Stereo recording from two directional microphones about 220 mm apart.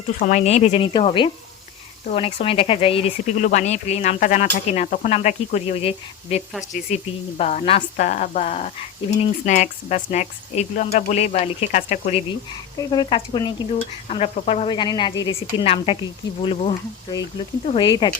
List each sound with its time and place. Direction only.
0.2 s speech: 35° left (ahead or behind)
12.9 s speech: 20° left (ahead or behind)